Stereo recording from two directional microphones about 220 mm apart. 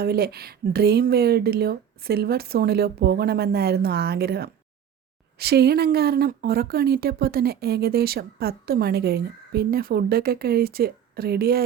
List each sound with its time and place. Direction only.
0.0 s speech: 45° right (ahead or behind)